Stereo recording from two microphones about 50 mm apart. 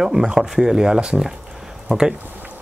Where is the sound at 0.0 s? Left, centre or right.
Centre.